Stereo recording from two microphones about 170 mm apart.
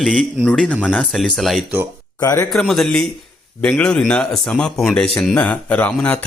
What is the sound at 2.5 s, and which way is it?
Speech, centre (ahead or behind).